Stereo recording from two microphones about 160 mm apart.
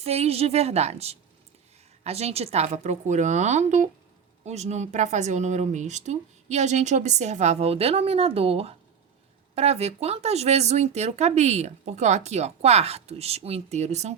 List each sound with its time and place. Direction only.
0.0 s a woman's voice: 40° right (ahead or behind)